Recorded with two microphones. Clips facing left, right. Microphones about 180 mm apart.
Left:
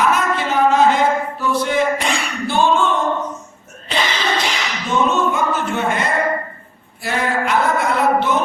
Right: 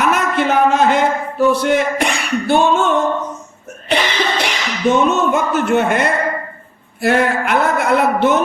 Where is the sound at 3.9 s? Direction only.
65° right (ahead or behind).